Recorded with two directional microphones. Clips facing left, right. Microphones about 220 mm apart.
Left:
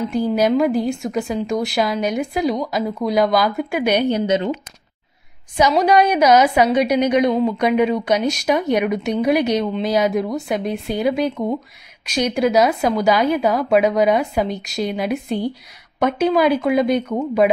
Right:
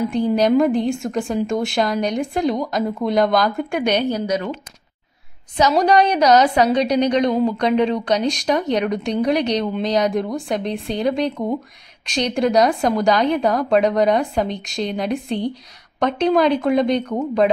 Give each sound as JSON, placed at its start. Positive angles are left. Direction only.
{"t": 0.1, "sound": "a woman's voice", "side_deg": 5}
{"t": 4.1, "sound": "speech", "side_deg": 25}
{"t": 5.7, "sound": "a woman's voice", "side_deg": 5}